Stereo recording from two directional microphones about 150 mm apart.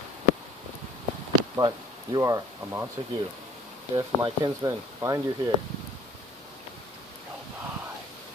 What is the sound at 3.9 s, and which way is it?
Speech, 30° right (ahead or behind).